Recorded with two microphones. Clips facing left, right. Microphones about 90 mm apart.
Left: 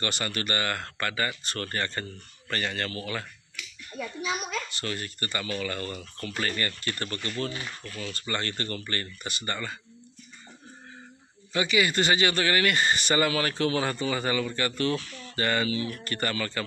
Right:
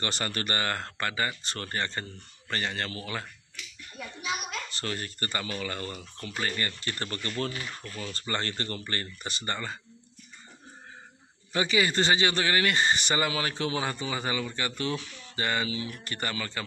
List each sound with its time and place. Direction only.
0.0 s speech: 35° right (ahead or behind)
4.6 s speech: 35° right (ahead or behind)
11.5 s speech: 30° right (ahead or behind); by 16.6 s 15° right (ahead or behind)